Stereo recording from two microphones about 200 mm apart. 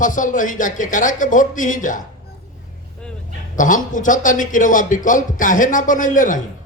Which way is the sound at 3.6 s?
40° left (ahead or behind).